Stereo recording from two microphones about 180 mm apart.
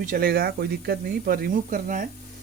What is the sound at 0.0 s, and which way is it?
Speech, 50° right (ahead or behind).